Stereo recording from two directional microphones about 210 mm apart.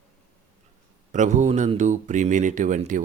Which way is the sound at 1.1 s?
35° right (ahead or behind).